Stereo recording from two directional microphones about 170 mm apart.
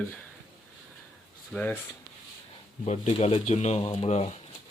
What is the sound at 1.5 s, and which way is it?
Speech, 10° left (ahead or behind).